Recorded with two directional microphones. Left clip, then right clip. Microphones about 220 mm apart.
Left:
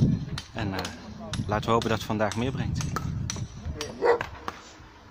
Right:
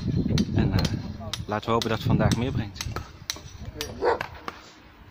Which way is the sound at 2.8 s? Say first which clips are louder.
Left 2 dB; 35° right (ahead or behind).